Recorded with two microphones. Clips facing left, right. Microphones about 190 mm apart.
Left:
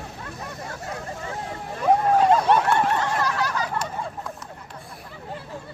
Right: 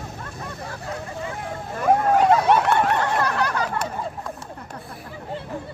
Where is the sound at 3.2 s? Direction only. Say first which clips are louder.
Right 2 dB; 60° right (ahead or behind).